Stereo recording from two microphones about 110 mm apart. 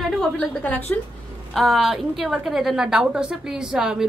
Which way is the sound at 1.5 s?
Centre (ahead or behind).